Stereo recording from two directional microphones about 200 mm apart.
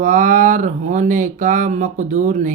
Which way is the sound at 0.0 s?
40° right (ahead or behind).